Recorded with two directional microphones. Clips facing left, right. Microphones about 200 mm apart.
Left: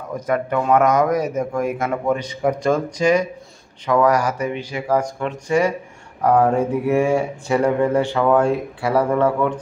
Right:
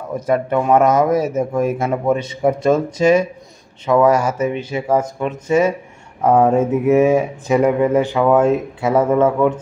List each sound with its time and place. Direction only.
0.1 s speech: 25° right (ahead or behind)